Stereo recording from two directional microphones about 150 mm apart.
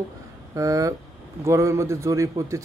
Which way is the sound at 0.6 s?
20° right (ahead or behind).